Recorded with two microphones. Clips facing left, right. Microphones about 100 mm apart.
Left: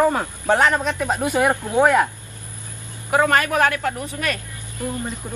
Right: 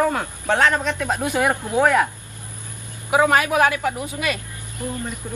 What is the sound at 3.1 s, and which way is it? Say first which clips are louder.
Speech: right 1 dB; 10° right (ahead or behind).